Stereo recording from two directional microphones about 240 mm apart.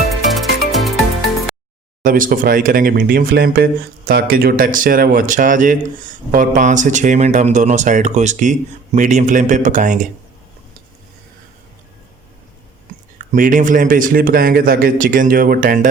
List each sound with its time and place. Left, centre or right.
0.3 s music: centre
2.0 s speech: right
12.9 s a sound: right
13.3 s speech: right